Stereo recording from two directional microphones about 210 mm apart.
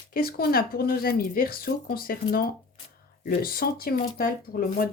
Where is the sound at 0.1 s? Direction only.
45° left (ahead or behind).